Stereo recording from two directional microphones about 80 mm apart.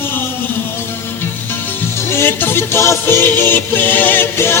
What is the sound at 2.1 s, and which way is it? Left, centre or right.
Music, left.